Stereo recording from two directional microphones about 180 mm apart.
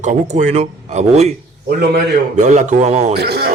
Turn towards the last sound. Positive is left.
turn(degrees=-65)  # may be behind; listen again after turning